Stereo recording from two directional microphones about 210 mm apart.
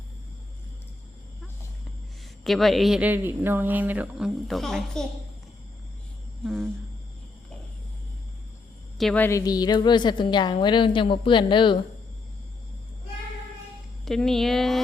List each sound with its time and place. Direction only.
2.4 s speech: centre (ahead or behind)
6.4 s insect: centre (ahead or behind)
9.0 s a woman's voice: 5° left (ahead or behind); by 11.8 s 25° left (ahead or behind)
14.0 s speech: centre (ahead or behind)